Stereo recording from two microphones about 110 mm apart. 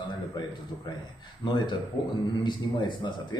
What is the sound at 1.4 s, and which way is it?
A man's voice, 45° left (ahead or behind).